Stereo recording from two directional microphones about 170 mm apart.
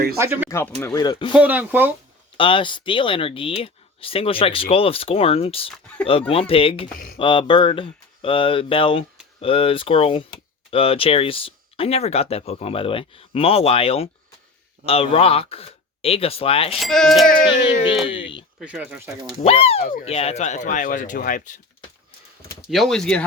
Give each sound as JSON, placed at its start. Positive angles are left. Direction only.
{"t": 0.2, "sound": "speech", "side_deg": -15}
{"t": 0.5, "sound": "speech", "side_deg": 15}
{"t": 0.9, "sound": "speech", "side_deg": 25}
{"t": 1.3, "sound": "speech", "side_deg": -10}
{"t": 2.4, "sound": "speech", "side_deg": 30}
{"t": 16.7, "sound": "speech", "side_deg": 0}
{"t": 18.2, "sound": "speech", "side_deg": 30}
{"t": 18.6, "sound": "speech", "side_deg": -5}
{"t": 19.4, "sound": "speech", "side_deg": 35}
{"t": 22.7, "sound": "speech", "side_deg": 0}